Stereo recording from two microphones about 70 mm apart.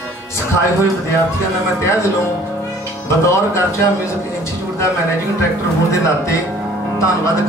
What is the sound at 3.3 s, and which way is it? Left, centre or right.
Speech, left.